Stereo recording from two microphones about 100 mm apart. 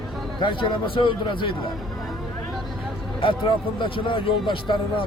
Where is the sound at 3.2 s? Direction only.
65° left (ahead or behind).